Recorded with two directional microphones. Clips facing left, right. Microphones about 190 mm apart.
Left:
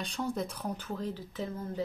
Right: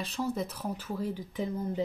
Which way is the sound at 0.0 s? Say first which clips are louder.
Right 1 dB; 5° right (ahead or behind).